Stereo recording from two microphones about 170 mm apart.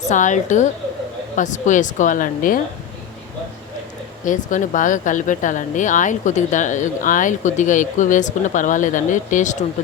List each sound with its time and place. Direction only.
0.0 s speech: 45° left (ahead or behind)
4.3 s speech: 50° left (ahead or behind)